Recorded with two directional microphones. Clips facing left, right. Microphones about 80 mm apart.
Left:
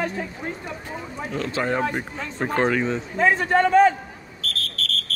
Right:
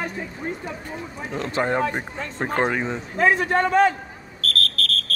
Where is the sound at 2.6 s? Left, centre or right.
Centre.